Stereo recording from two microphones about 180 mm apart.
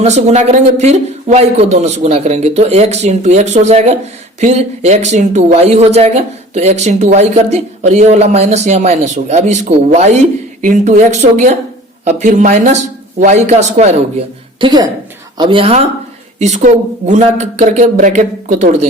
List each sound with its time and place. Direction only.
0.0 s speech: 40° right (ahead or behind)
14.6 s a woman's voice: 25° right (ahead or behind); by 18.9 s 40° right (ahead or behind)